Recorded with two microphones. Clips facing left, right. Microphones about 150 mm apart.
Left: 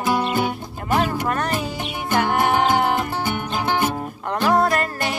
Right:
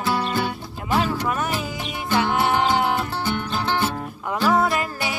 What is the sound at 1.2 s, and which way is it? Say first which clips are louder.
Music: left 1 dB; 5° right (ahead or behind).